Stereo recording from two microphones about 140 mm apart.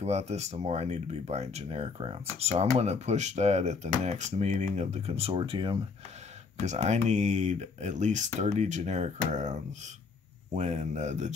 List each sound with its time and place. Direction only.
0.0 s speech: 50° right (ahead or behind); by 5.8 s 35° right (ahead or behind)
6.6 s speech: 55° right (ahead or behind)